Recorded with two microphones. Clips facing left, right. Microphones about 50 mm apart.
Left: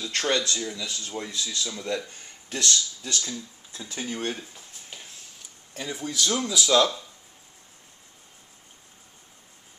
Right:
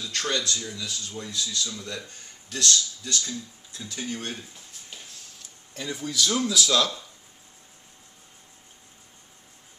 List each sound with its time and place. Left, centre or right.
0.0 s speech: left
5.8 s speech: centre